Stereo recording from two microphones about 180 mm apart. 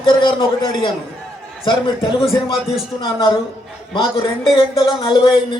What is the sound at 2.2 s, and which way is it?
Speech, centre (ahead or behind).